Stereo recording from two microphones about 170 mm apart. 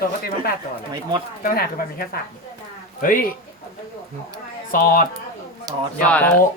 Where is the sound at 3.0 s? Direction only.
55° left (ahead or behind).